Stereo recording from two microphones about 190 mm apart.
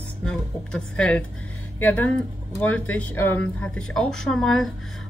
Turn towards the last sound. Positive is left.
turn(degrees=0)  # may be behind; listen again after turning